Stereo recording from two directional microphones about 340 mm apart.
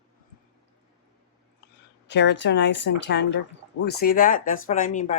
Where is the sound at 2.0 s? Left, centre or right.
Left.